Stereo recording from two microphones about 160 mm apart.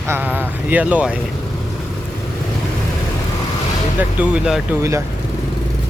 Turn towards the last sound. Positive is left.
turn(degrees=-20)  # may be behind; listen again after turning